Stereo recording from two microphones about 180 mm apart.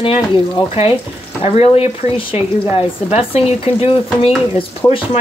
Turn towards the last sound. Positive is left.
turn(degrees=10)  # may be behind; listen again after turning